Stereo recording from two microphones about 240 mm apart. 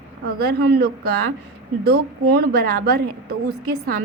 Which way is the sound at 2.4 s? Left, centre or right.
Right.